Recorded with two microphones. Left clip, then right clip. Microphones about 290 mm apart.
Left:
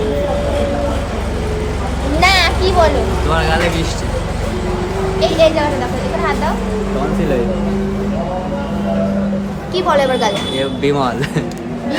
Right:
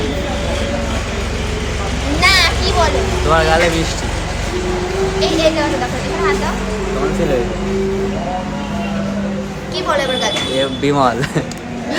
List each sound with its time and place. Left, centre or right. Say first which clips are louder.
2.2 s a sound: even; centre
3.3 s speech: right 4 dB; centre
5.2 s speech: left 3 dB; centre
9.7 s a woman's voice: left 4 dB; centre
10.6 s speech: right 2 dB; centre